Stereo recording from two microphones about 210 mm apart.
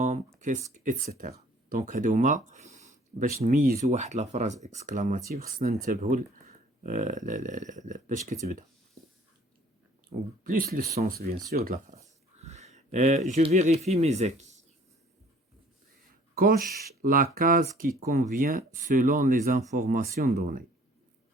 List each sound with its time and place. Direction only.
0.3 s a sound: 35° right (ahead or behind)
1.2 s speech: 40° right (ahead or behind)
10.4 s speech: 40° right (ahead or behind)
12.4 s a sound: 30° right (ahead or behind)
13.3 s speech: 30° right (ahead or behind)
16.3 s speech: 45° right (ahead or behind)